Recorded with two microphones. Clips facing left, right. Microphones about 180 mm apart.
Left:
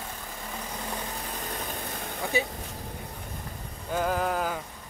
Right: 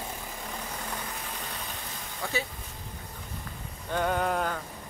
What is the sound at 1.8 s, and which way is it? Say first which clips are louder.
Vehicle: left 6 dB; 55° left (ahead or behind).